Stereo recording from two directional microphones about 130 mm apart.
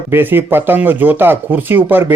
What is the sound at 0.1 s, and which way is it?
Speech, 15° right (ahead or behind).